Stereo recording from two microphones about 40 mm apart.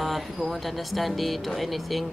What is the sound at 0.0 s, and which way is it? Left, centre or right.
Speech, centre.